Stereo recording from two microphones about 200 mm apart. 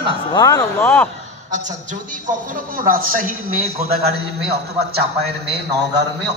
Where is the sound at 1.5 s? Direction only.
40° right (ahead or behind).